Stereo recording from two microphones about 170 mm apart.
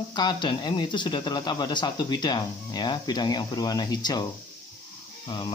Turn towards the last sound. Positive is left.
turn(degrees=25)  # may be behind; listen again after turning